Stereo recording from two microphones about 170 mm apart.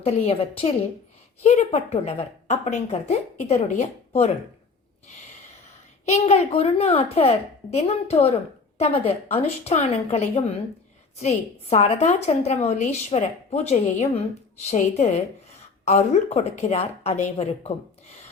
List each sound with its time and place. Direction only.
0.0 s a woman's voice: 35° left (ahead or behind)
6.1 s a woman's voice: 40° left (ahead or behind)